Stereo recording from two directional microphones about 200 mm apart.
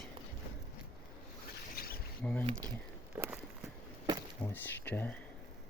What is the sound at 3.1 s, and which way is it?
Walk, 10° right (ahead or behind).